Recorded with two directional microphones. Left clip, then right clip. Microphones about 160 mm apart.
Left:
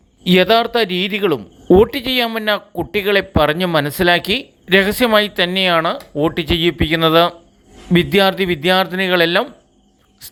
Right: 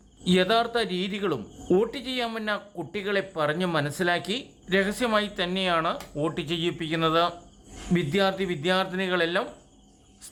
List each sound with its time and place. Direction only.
0.3 s speech: 35° left (ahead or behind)